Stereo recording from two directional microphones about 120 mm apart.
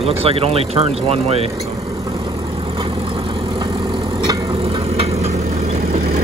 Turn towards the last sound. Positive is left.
turn(degrees=-60)  # may be behind; listen again after turning